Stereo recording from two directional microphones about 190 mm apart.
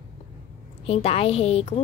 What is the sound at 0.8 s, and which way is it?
A woman's voice, 30° left (ahead or behind).